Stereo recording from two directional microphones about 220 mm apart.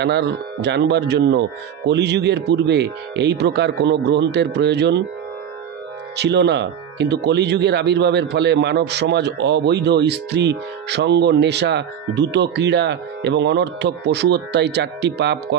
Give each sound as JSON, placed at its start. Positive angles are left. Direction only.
{"t": 0.0, "sound": "speech", "side_deg": -50}
{"t": 6.1, "sound": "speech", "side_deg": -50}